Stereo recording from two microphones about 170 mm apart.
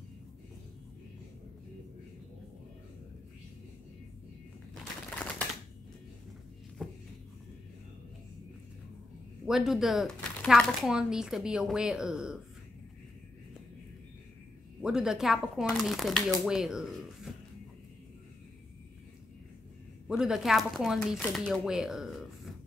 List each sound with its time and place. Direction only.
6.8 s a sound: 5° left (ahead or behind)
9.5 s speech: 5° right (ahead or behind)
14.8 s speech: 5° right (ahead or behind)
20.1 s speech: 5° right (ahead or behind)